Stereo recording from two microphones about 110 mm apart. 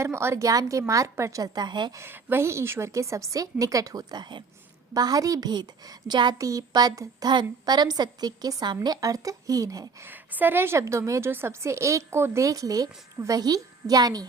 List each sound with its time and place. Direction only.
0.0 s a woman's voice: 25° right (ahead or behind); by 1.9 s 40° right (ahead or behind)
2.0 s a woman's voice: 20° right (ahead or behind)
10.1 s a woman's voice: 15° right (ahead or behind); by 14.3 s 35° right (ahead or behind)